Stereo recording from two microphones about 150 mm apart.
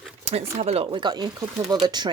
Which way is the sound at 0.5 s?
45° right (ahead or behind).